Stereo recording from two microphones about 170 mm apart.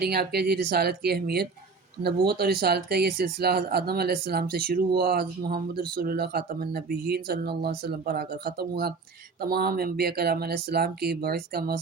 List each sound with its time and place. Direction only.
0.0 s speech: 70° right (ahead or behind)